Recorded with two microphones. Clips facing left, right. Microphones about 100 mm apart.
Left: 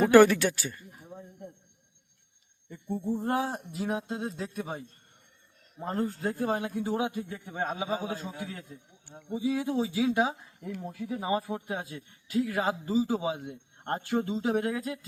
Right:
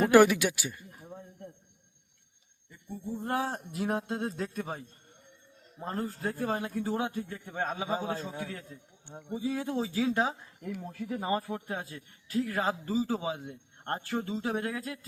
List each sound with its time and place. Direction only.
0.1 s speech: 10° right (ahead or behind)
3.0 s a sound: 45° left (ahead or behind)
3.2 s speech: 20° left (ahead or behind)
3.7 s speech: centre (ahead or behind)
5.8 s speech: 25° left (ahead or behind)